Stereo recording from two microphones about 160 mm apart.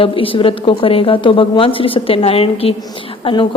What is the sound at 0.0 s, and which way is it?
A woman's voice, 35° left (ahead or behind).